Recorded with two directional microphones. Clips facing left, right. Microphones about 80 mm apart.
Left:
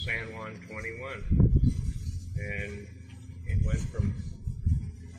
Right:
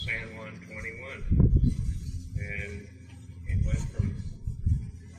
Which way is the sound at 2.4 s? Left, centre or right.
Left.